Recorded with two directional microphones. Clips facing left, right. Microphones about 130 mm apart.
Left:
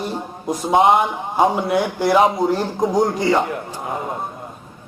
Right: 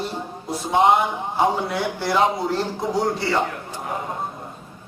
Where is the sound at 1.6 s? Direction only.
15° left (ahead or behind).